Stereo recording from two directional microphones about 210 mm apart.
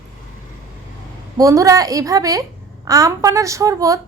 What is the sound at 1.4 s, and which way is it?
Speech, 15° right (ahead or behind).